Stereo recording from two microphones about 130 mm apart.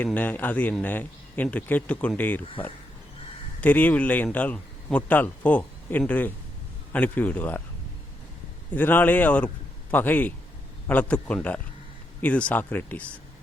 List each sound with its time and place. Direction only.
0.0 s speech: 15° left (ahead or behind)
3.6 s speech: 10° left (ahead or behind)
8.7 s speech: 15° left (ahead or behind)